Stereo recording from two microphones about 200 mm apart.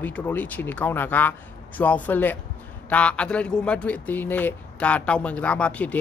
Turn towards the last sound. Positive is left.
turn(degrees=5)  # may be behind; listen again after turning